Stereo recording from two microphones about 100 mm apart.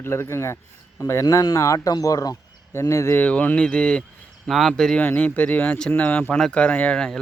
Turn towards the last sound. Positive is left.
turn(degrees=5)  # may be behind; listen again after turning